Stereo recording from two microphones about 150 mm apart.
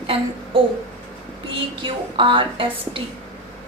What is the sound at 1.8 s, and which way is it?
A woman's voice, 35° right (ahead or behind).